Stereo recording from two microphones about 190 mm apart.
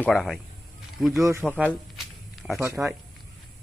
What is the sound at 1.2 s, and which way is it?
Speech, 15° right (ahead or behind).